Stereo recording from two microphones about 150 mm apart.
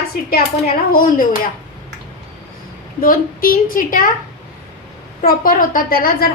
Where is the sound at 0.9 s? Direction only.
70° left (ahead or behind).